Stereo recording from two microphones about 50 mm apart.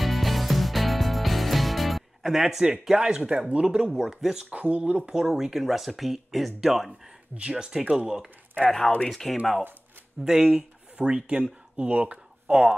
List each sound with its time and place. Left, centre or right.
0.0 s music: centre
2.8 s speech: centre
3.3 s speech: right; by 4.5 s centre
4.5 s speech: right
4.9 s speech: centre
8.6 s speech: centre
10.4 s speech: right